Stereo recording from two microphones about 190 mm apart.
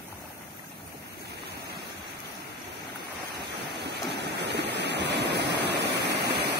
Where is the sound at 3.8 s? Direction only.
65° right (ahead or behind).